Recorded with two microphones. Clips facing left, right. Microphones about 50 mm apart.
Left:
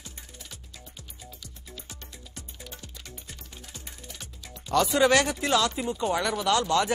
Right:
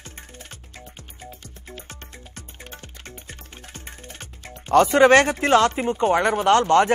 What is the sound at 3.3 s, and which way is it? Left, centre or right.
Speech, right.